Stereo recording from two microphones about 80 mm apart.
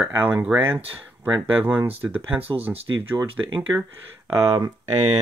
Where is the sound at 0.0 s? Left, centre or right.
Right.